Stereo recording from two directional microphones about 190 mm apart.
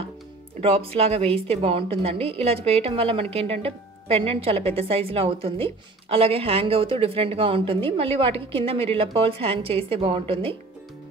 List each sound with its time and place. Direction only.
0.6 s a woman's voice: 30° right (ahead or behind)